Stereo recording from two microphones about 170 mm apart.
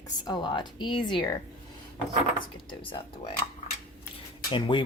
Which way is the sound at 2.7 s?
30° left (ahead or behind).